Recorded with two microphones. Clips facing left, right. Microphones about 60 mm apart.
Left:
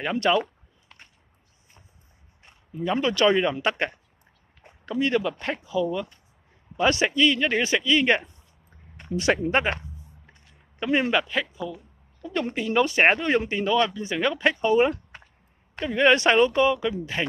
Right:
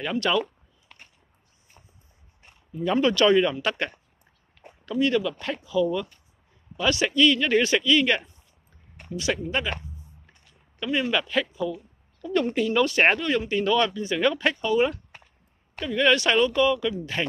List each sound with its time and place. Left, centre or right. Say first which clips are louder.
0.0 s speech: left 2 dB; left
2.8 s speech: right 2 dB; centre
3.2 s speech: left 1 dB; left
6.8 s speech: left 2 dB; left
7.2 s speech: right 2 dB; centre
9.1 s speech: left 5 dB; left
10.8 s speech: left 3 dB; left
11.1 s speech: even; centre
13.2 s speech: left 2 dB; left
13.5 s speech: even; centre
14.6 s speech: left 3 dB; left
17.0 s speech: even; centre